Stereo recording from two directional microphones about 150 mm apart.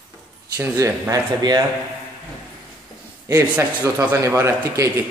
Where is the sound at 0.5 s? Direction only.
15° right (ahead or behind).